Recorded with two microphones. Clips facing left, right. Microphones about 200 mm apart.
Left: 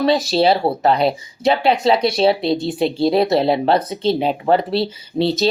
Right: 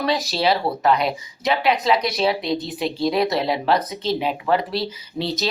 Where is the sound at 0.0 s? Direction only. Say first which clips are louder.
Left 6 dB; 30° left (ahead or behind).